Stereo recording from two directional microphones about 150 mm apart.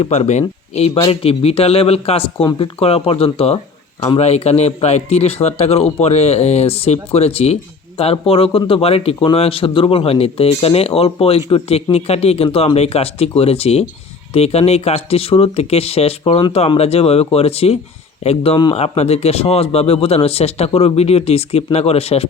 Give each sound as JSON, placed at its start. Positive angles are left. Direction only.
{"t": 0.0, "sound": "a man's voice", "side_deg": 45}